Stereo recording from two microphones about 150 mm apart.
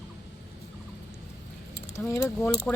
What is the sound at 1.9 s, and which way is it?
Speech, 15° left (ahead or behind).